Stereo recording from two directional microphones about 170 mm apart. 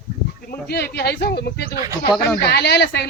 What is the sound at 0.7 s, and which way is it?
Speech, 70° left (ahead or behind).